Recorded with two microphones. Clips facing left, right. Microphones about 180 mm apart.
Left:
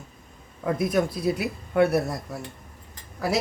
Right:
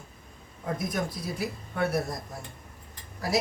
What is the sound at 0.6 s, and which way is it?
Speech, 65° left (ahead or behind).